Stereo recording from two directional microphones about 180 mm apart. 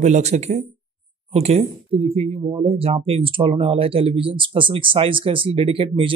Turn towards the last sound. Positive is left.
turn(degrees=-30)  # may be behind; listen again after turning